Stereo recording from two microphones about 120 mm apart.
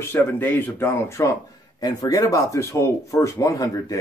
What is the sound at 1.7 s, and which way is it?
Speech, 35° left (ahead or behind).